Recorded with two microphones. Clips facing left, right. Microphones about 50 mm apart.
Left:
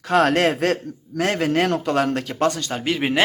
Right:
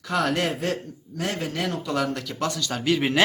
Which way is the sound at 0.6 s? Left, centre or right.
Left.